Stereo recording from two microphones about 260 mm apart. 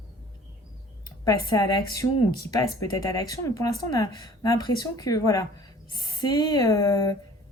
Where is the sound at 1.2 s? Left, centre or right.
Centre.